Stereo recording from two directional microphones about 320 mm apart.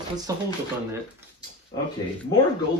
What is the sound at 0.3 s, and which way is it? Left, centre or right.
Speech, centre.